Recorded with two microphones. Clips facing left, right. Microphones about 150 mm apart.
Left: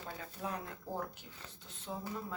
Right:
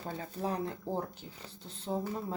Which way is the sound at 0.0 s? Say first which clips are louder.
Right 6 dB; 35° right (ahead or behind).